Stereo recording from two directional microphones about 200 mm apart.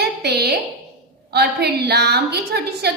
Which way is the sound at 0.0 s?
55° right (ahead or behind).